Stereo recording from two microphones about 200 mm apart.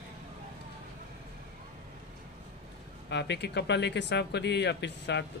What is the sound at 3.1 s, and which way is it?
Speech, 60° left (ahead or behind).